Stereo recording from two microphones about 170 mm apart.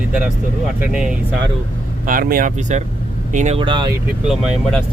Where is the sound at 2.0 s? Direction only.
55° right (ahead or behind).